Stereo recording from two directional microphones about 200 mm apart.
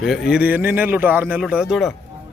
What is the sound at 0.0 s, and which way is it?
Speech, centre (ahead or behind).